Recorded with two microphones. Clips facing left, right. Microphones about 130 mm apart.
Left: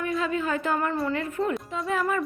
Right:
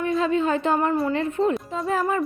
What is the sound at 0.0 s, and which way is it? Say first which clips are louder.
A woman's voice: right 5 dB; 25° right (ahead or behind).